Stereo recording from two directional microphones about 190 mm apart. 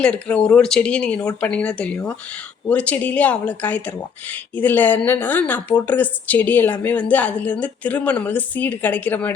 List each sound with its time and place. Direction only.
0.0 s a woman's voice: 5° left (ahead or behind)